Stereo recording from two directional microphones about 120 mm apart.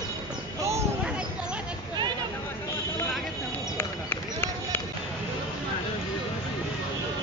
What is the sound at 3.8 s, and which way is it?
Run, 20° left (ahead or behind).